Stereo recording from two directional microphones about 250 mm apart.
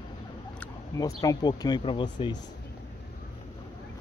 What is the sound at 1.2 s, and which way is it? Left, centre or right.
Speech, centre.